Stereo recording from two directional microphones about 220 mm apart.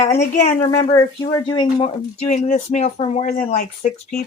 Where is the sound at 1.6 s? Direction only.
30° left (ahead or behind).